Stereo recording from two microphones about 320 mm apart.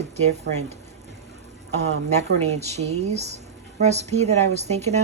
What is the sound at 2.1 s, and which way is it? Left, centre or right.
A woman's voice, right.